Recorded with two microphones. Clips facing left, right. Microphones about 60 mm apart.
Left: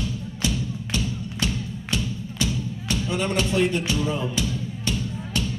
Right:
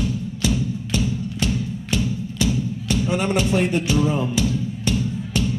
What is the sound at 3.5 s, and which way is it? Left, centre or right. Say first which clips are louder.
Speech: right 3 dB; right.